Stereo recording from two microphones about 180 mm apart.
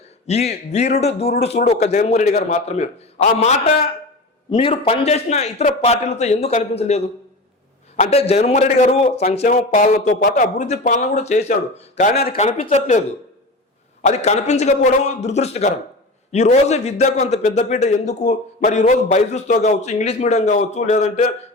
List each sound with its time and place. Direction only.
0.3 s a man's voice: 35° left (ahead or behind)